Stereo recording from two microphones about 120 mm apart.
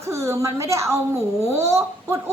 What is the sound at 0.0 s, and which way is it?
A woman's voice, 25° right (ahead or behind).